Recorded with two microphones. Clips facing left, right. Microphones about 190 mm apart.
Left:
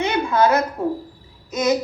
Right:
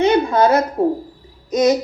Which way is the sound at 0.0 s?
30° right (ahead or behind).